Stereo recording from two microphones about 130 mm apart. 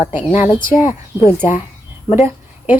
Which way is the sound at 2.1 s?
20° right (ahead or behind).